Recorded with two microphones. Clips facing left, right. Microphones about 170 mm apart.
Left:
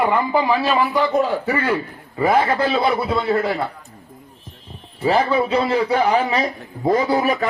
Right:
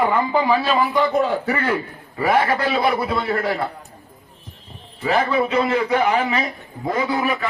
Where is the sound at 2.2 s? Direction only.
25° left (ahead or behind).